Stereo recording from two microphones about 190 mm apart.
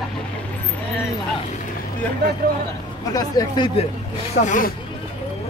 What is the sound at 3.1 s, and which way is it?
Speech, 25° left (ahead or behind).